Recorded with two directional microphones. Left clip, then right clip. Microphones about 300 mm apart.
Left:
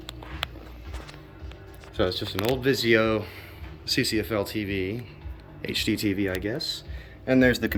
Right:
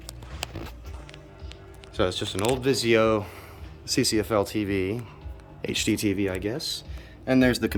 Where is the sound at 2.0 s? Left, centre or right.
Centre.